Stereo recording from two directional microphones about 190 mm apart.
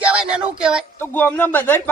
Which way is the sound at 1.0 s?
10° left (ahead or behind).